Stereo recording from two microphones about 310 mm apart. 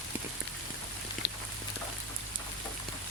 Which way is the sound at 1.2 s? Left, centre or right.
Left.